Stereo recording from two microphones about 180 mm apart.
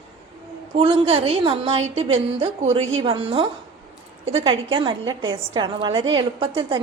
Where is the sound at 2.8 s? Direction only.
90° right.